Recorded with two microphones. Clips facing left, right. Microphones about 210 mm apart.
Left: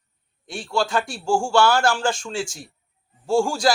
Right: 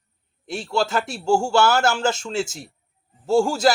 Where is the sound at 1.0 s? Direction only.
25° right (ahead or behind).